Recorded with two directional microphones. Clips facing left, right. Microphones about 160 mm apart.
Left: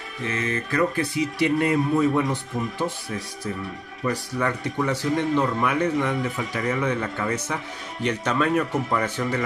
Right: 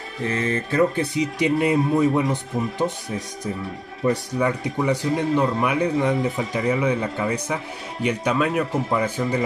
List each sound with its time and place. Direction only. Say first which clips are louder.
0.2 s speech: right 3 dB; 30° right (ahead or behind)
4.0 s speech: right 4 dB; 25° right (ahead or behind)
6.6 s speech: right 3 dB; 10° right (ahead or behind)